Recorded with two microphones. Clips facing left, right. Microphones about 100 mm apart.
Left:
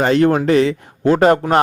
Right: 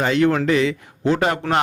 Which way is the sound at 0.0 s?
40° left (ahead or behind).